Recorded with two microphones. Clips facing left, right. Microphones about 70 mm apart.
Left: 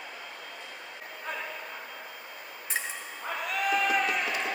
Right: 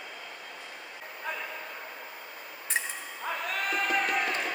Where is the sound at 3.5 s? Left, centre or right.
Right.